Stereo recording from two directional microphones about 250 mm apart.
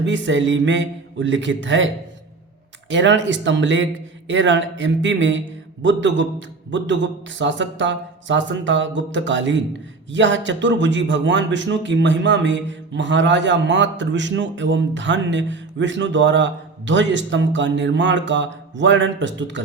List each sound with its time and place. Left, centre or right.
0.0 s a man's voice: right
2.9 s a man's voice: right